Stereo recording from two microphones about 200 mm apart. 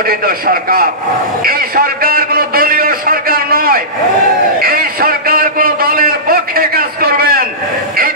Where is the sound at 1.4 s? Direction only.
45° right (ahead or behind).